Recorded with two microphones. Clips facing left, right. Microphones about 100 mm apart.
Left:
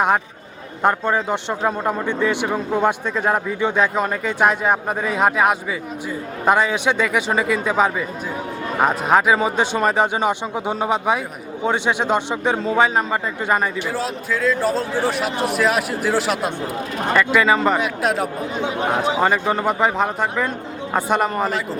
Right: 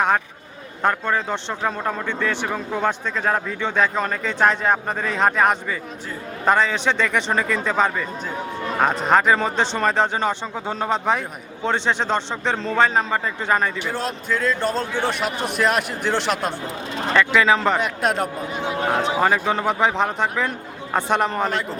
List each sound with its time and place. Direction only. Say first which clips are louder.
0.8 s a man's voice: left 3 dB; 15° left (ahead or behind)
18.6 s speech: left 1 dB; 20° left (ahead or behind)
19.2 s speech: left 1 dB; 5° left (ahead or behind)